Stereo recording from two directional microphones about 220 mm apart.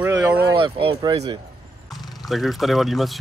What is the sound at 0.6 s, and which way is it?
Speech, 25° right (ahead or behind).